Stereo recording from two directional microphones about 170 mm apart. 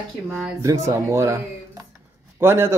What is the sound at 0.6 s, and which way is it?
Speech, 20° right (ahead or behind).